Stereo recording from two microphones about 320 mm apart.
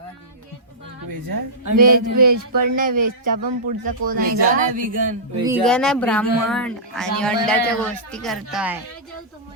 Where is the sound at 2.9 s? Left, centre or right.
Right.